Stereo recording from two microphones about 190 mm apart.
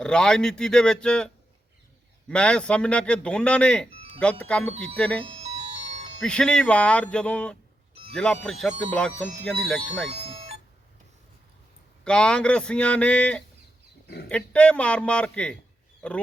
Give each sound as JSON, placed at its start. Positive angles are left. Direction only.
{"t": 0.0, "sound": "a man's voice", "side_deg": 5}
{"t": 5.2, "sound": "music", "side_deg": -30}
{"t": 6.2, "sound": "a man's voice", "side_deg": 5}
{"t": 10.1, "sound": "music", "side_deg": -30}
{"t": 12.0, "sound": "a man's voice", "side_deg": 5}